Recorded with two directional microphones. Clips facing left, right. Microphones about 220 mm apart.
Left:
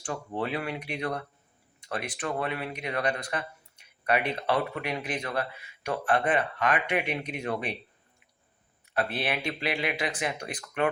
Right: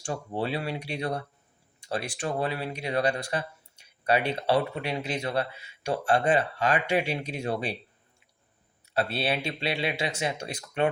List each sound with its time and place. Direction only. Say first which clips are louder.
0.0 s speech: right 1 dB; 30° right (ahead or behind)
8.9 s speech: right 2 dB; 30° right (ahead or behind)